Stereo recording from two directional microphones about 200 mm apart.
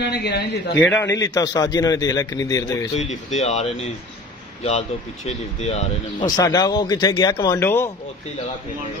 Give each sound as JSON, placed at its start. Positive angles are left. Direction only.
{"t": 0.0, "sound": "a man's voice", "side_deg": 55}
{"t": 0.7, "sound": "a man's voice", "side_deg": 5}
{"t": 1.0, "sound": "a man's voice", "side_deg": 20}
{"t": 3.0, "sound": "speech", "side_deg": 35}
{"t": 6.2, "sound": "speech", "side_deg": 20}